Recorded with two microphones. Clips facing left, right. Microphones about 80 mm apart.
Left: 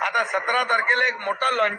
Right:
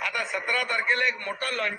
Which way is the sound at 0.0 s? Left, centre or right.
Left.